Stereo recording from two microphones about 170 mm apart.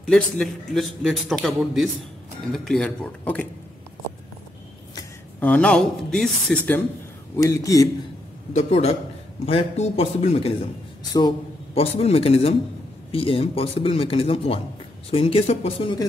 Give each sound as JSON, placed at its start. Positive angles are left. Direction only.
{"t": 0.0, "sound": "a man's voice", "side_deg": 5}
{"t": 5.4, "sound": "a man's voice", "side_deg": 5}
{"t": 7.3, "sound": "a man's voice", "side_deg": 20}
{"t": 8.5, "sound": "speech", "side_deg": 40}